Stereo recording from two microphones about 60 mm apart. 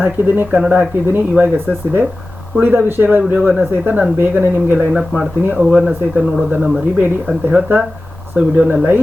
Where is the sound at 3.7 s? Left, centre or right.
Right.